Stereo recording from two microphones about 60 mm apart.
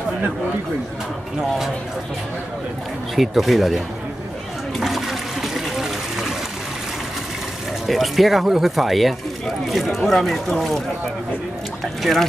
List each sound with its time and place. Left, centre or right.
3.2 s speech: centre
4.7 s toilet flush: centre
7.8 s speech: centre
11.8 s speech: centre